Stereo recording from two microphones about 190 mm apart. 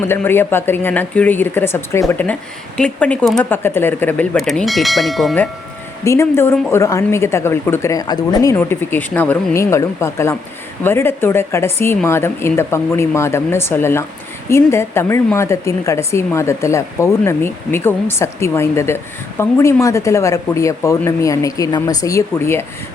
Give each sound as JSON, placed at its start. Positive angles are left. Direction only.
{"t": 0.0, "sound": "a woman's voice", "side_deg": 10}
{"t": 6.1, "sound": "a woman's voice", "side_deg": 15}